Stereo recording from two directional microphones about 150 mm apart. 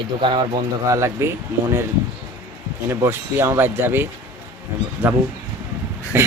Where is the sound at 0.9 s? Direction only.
20° right (ahead or behind).